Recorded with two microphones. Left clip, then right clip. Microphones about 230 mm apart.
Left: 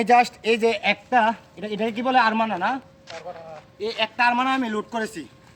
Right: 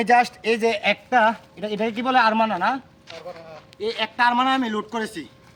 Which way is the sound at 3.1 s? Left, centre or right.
Centre.